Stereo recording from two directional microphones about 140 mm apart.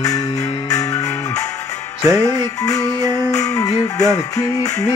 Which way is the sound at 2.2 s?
25° left (ahead or behind).